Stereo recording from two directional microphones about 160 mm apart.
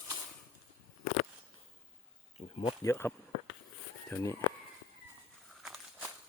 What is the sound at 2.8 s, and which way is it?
Speech, 15° left (ahead or behind).